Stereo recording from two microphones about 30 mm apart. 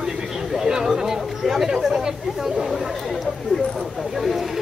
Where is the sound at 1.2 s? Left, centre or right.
Centre.